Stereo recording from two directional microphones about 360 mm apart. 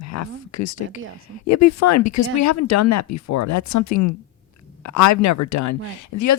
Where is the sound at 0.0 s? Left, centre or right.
Left.